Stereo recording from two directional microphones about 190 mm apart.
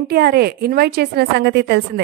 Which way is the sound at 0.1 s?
55° right (ahead or behind).